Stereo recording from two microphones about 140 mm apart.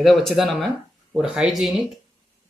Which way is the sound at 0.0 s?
Centre (ahead or behind).